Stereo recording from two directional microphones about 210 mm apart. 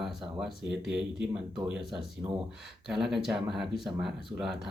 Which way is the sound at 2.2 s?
20° right (ahead or behind).